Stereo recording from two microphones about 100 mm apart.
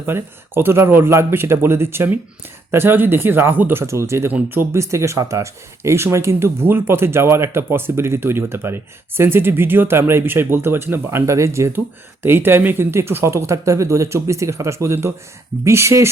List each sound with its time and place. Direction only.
0.0 s speech: 25° right (ahead or behind)
4.3 s speech: 15° right (ahead or behind)
4.7 s speech: 30° right (ahead or behind)